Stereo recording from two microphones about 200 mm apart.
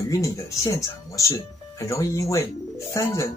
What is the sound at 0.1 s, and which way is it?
Speech, 15° left (ahead or behind).